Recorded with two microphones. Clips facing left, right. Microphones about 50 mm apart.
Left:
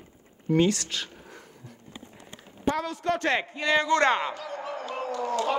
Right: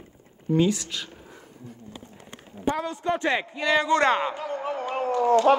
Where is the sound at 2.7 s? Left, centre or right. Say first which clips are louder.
Right 1 dB; centre.